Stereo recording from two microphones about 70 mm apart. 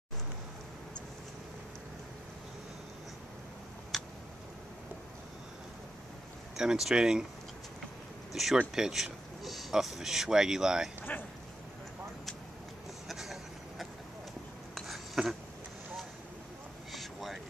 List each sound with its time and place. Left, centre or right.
3.9 s tick: centre
6.5 s speech: centre
8.3 s a sound: centre
8.7 s speech: centre
11.0 s speech: left
13.1 s vehicle: centre
15.2 s speech: centre
16.9 s vehicle: centre